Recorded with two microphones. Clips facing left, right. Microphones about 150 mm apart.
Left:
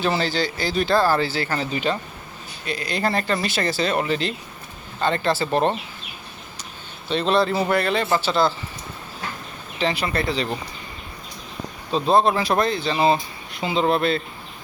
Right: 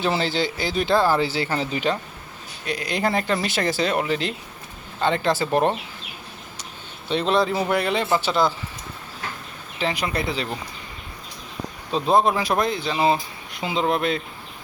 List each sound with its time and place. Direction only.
0.0 s speech: 20° right (ahead or behind)
7.1 s speech: 15° right (ahead or behind)
9.8 s speech: 15° right (ahead or behind)
11.9 s speech: 10° right (ahead or behind)